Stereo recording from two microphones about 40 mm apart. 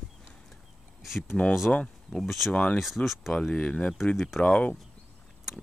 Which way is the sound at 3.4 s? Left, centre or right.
Left.